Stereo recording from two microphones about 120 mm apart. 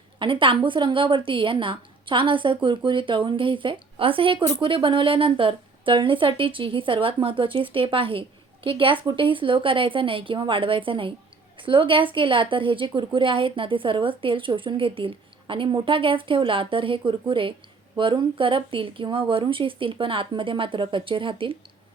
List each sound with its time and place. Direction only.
0.2 s a woman's voice: 45° right (ahead or behind)